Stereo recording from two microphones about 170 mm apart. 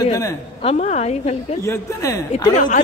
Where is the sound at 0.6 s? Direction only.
40° left (ahead or behind).